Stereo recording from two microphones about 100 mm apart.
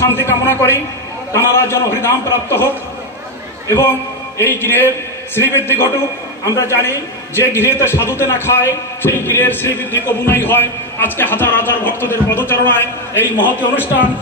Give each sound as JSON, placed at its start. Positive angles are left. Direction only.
{"t": 0.0, "sound": "a man's voice", "side_deg": 25}
{"t": 13.6, "sound": "speech", "side_deg": -15}